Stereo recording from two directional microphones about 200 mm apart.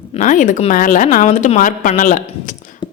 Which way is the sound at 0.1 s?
40° left (ahead or behind).